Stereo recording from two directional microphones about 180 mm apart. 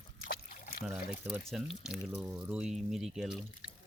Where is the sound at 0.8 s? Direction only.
5° right (ahead or behind).